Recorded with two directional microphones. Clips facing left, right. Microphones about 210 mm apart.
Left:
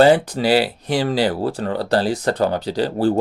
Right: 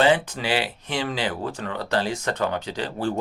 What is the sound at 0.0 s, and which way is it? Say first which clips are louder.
Speech: left 7 dB; 40° left (ahead or behind).